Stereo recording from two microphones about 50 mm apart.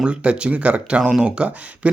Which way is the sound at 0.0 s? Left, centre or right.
Right.